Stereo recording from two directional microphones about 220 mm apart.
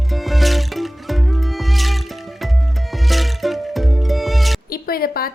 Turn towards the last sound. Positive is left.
turn(degrees=40)  # may be behind; listen again after turning